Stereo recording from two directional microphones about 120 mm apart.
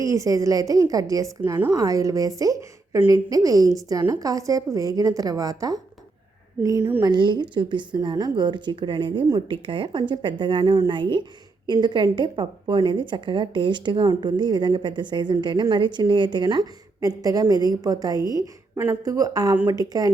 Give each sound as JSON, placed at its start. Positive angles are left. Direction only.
{"t": 0.0, "sound": "a woman's voice", "side_deg": -30}
{"t": 7.0, "sound": "speech", "side_deg": -40}